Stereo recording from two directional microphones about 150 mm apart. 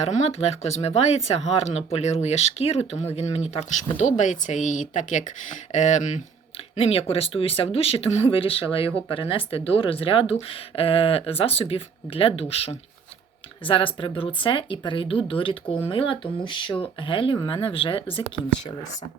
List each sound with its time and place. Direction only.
0.0 s speech: 45° left (ahead or behind)
6.7 s speech: 40° left (ahead or behind)